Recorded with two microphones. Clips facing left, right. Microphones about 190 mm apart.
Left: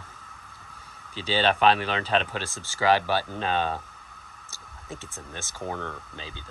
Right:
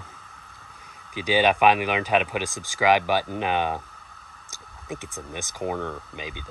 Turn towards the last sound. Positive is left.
turn(degrees=-15)  # may be behind; listen again after turning